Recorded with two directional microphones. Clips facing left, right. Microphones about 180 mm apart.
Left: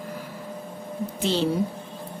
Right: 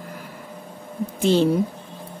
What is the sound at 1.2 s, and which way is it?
Speech, 50° right (ahead or behind).